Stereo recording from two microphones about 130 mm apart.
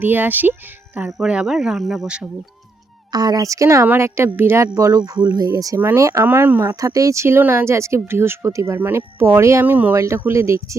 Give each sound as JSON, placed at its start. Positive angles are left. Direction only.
{"t": 0.0, "sound": "speech", "side_deg": -15}
{"t": 3.1, "sound": "speech", "side_deg": -30}